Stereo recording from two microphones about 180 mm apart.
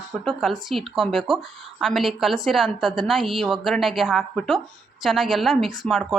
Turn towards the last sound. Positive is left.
turn(degrees=0)  # may be behind; listen again after turning